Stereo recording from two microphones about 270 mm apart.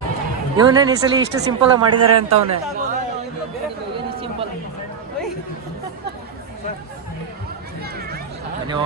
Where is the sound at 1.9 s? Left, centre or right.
Right.